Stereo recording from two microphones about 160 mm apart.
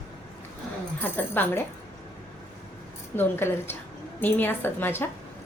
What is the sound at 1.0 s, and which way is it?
Speech, 10° left (ahead or behind).